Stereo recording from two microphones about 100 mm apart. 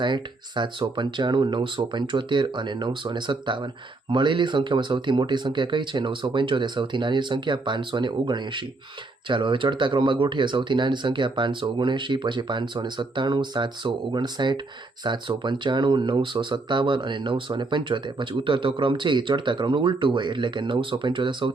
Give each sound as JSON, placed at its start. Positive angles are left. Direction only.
{"t": 0.0, "sound": "speech", "side_deg": -50}